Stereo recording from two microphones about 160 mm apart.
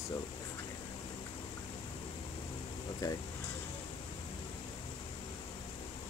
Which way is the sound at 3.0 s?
25° left (ahead or behind).